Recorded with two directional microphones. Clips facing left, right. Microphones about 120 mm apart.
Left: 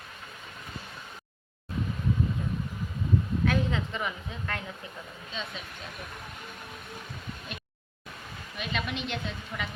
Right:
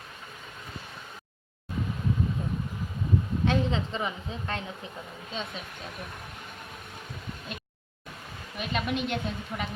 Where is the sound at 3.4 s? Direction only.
25° right (ahead or behind).